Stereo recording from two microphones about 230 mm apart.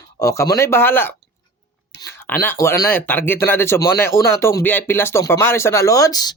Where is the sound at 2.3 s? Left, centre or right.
Centre.